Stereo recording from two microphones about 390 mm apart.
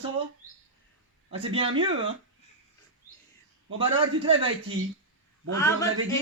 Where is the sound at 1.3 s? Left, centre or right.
Centre.